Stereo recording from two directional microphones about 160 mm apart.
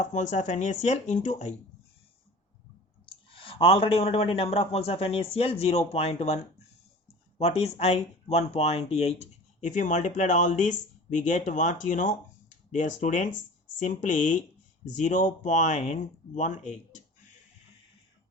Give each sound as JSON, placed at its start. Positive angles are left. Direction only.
{"t": 0.0, "sound": "speech", "side_deg": 50}
{"t": 3.1, "sound": "speech", "side_deg": 35}